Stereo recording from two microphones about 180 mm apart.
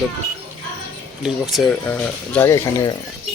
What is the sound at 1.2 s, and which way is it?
Speech, centre (ahead or behind).